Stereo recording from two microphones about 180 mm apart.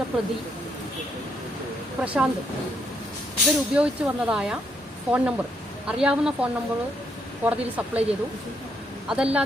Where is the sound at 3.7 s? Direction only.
5° right (ahead or behind).